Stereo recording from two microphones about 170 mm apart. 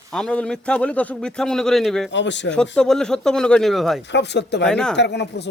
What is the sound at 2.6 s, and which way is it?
Speech, 5° left (ahead or behind).